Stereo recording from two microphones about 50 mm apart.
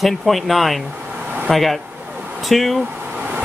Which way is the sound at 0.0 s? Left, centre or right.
Centre.